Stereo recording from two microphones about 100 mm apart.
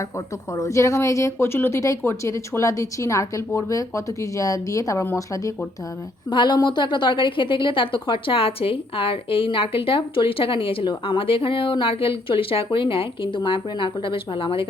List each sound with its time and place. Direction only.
0.5 s speech: 30° left (ahead or behind)
6.3 s a woman's voice: 50° left (ahead or behind)